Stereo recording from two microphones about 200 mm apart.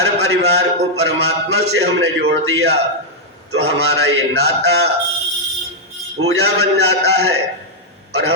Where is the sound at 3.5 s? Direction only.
75° right (ahead or behind).